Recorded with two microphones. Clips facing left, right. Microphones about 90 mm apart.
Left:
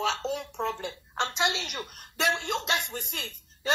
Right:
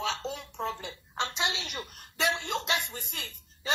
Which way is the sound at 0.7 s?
55° left (ahead or behind).